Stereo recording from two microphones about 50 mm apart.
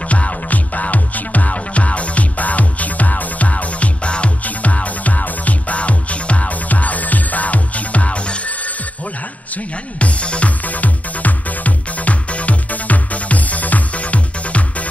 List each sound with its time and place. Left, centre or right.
0.1 s music: left
9.9 s music: left